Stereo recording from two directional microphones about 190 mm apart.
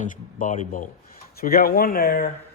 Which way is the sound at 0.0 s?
40° left (ahead or behind).